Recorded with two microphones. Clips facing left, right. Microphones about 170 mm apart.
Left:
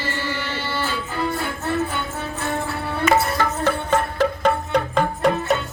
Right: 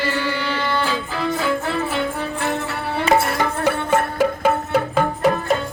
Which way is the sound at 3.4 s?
10° right (ahead or behind).